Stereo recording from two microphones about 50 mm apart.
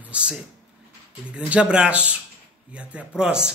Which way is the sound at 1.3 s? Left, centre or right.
Right.